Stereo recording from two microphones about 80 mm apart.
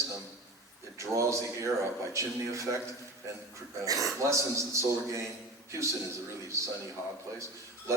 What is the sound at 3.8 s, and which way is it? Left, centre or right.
A man's voice, right.